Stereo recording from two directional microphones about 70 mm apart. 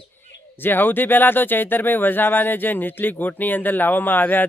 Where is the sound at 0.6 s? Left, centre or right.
Left.